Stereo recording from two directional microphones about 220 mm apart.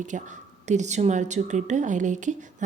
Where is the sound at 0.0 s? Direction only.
35° right (ahead or behind).